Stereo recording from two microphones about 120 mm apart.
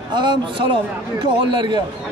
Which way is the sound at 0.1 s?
40° right (ahead or behind).